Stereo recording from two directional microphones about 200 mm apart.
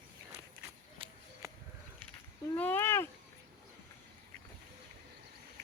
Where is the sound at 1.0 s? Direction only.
25° right (ahead or behind).